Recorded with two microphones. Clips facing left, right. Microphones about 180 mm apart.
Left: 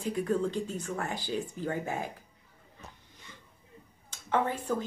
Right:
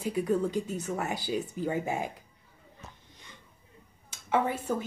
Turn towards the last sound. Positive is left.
turn(degrees=-10)  # may be behind; listen again after turning